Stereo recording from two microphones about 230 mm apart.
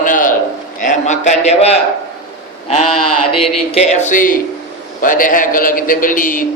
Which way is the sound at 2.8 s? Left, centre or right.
Left.